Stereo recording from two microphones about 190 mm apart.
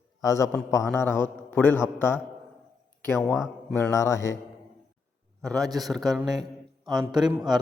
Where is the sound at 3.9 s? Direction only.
15° left (ahead or behind).